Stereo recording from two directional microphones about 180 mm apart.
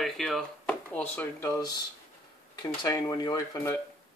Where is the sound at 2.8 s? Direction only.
15° left (ahead or behind).